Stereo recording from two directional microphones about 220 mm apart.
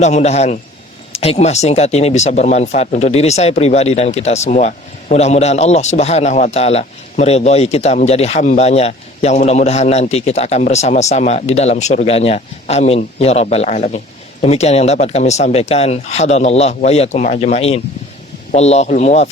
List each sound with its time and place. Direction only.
0.0 s speech: 30° left (ahead or behind)